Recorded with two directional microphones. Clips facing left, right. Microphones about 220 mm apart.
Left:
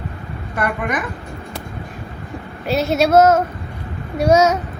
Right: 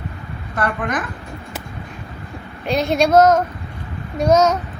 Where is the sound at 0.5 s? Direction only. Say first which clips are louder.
Even; 10° left (ahead or behind).